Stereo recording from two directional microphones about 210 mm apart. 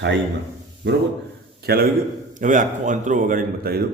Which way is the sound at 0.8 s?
55° right (ahead or behind).